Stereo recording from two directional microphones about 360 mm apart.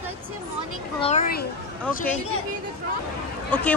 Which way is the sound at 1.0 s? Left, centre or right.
Left.